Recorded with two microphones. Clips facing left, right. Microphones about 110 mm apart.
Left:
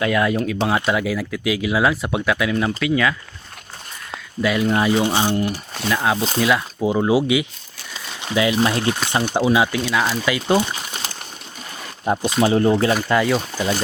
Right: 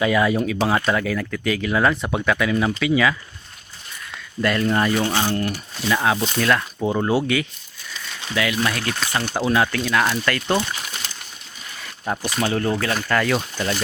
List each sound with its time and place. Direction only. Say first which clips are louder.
0.0 s speech: even; centre (ahead or behind)
4.4 s speech: left 1 dB; 5° left (ahead or behind)
4.9 s speech: left 3 dB; 20° left (ahead or behind)
5.9 s speech: even; centre (ahead or behind)
8.3 s speech: left 4 dB; 25° left (ahead or behind); by 10.4 s 5° left (ahead or behind)
10.5 s a sound: left 3 dB; 20° left (ahead or behind)
12.0 s speech: left 5 dB; 20° left (ahead or behind); by 13.7 s 5° left (ahead or behind)